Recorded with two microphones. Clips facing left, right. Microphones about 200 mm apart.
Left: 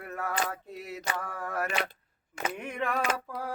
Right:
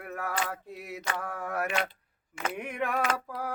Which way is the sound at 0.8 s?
60° right (ahead or behind).